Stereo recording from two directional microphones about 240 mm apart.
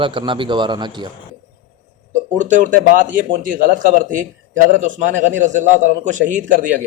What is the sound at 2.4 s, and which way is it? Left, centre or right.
Speech, right.